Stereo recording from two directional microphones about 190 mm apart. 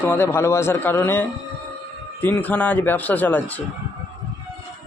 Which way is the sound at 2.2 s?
10° left (ahead or behind).